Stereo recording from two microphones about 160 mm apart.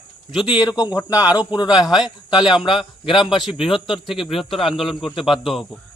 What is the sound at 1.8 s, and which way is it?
Speech, 5° right (ahead or behind).